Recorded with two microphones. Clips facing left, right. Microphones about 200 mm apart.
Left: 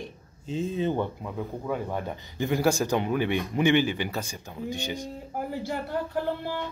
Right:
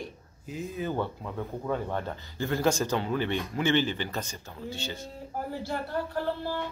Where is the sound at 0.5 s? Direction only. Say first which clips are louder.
Left 6 dB; 25° left (ahead or behind).